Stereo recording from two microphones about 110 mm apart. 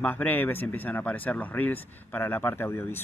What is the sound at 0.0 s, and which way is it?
Speech, 15° left (ahead or behind).